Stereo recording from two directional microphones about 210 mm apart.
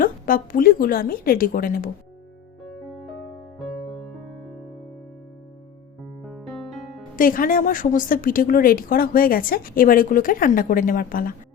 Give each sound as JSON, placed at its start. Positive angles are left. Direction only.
{"t": 0.0, "sound": "a woman's voice", "side_deg": 40}
{"t": 2.6, "sound": "music", "side_deg": 0}
{"t": 6.2, "sound": "music", "side_deg": 0}
{"t": 7.2, "sound": "a woman's voice", "side_deg": 40}